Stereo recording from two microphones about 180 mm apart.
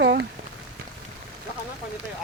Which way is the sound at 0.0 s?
90° right.